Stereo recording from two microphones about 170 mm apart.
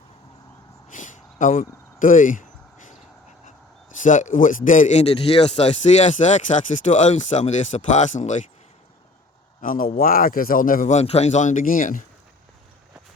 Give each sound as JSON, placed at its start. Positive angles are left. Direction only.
{"t": 0.9, "sound": "a sound", "side_deg": 50}
{"t": 3.4, "sound": "a man's voice", "side_deg": 50}
{"t": 9.6, "sound": "a man's voice", "side_deg": 55}